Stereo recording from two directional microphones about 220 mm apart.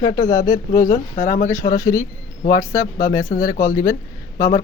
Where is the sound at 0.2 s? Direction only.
15° left (ahead or behind).